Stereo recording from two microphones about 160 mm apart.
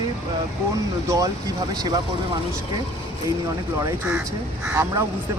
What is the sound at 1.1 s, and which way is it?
Speech, 20° right (ahead or behind).